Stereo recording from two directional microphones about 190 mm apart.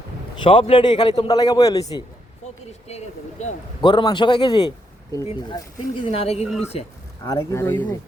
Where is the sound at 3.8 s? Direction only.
25° left (ahead or behind).